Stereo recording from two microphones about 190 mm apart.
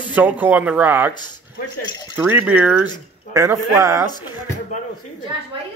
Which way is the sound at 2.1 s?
10° right (ahead or behind).